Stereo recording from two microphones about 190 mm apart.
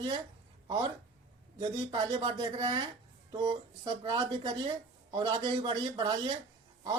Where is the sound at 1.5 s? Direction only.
25° right (ahead or behind).